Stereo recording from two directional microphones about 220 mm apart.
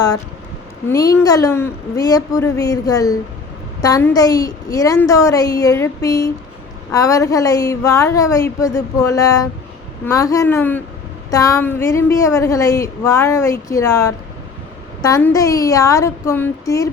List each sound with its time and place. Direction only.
0.9 s a woman's voice: 15° left (ahead or behind)